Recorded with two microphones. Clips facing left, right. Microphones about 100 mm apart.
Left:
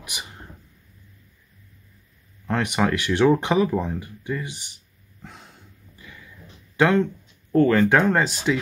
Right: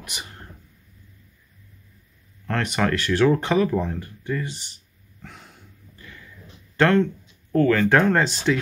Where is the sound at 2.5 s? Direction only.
10° left (ahead or behind).